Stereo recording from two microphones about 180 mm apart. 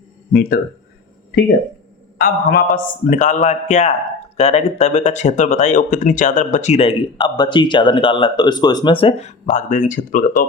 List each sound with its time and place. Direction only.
0.3 s a man's voice: 55° left (ahead or behind)
2.1 s a man's voice: 55° left (ahead or behind)